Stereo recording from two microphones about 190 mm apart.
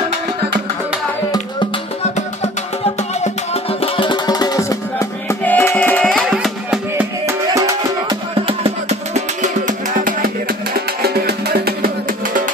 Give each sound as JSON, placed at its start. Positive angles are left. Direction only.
{"t": 3.2, "sound": "music", "side_deg": 30}
{"t": 7.2, "sound": "music", "side_deg": -15}
{"t": 8.4, "sound": "music", "side_deg": -30}
{"t": 11.0, "sound": "music", "side_deg": -55}